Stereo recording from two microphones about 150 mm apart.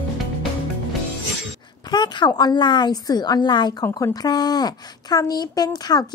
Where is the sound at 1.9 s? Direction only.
30° left (ahead or behind).